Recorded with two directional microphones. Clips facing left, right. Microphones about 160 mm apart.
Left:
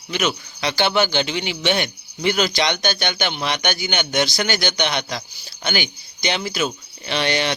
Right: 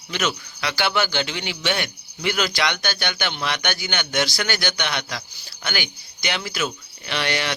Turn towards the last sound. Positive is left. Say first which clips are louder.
# left 4 dB
turn(degrees=25)  # may be behind; listen again after turning